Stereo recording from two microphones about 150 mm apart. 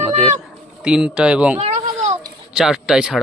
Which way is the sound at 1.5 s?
45° right (ahead or behind).